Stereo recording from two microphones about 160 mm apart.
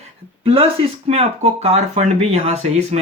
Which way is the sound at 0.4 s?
40° right (ahead or behind).